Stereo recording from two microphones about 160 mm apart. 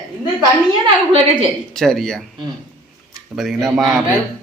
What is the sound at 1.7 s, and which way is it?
Speech, centre (ahead or behind).